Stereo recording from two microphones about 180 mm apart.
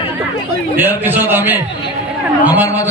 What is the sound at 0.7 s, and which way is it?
A man's voice, 10° right (ahead or behind).